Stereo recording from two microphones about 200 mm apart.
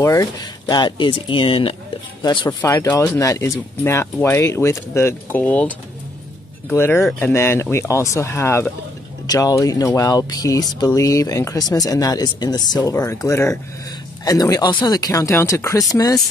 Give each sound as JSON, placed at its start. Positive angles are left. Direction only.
{"t": 0.0, "sound": "speech", "side_deg": 15}